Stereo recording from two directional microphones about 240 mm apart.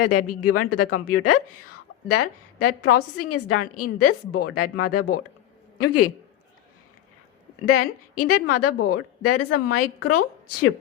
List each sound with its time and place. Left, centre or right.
0.0 s a woman's voice: left
7.7 s a woman's voice: left